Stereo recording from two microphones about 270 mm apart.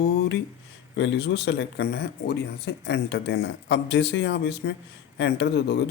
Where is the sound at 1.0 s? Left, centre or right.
Left.